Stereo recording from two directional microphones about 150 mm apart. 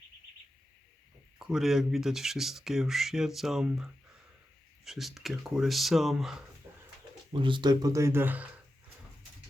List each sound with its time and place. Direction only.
1.5 s speech: centre (ahead or behind)
4.9 s speech: centre (ahead or behind)
6.7 s a sound: 15° right (ahead or behind)
7.3 s speech: 35° right (ahead or behind); by 8.4 s 10° right (ahead or behind)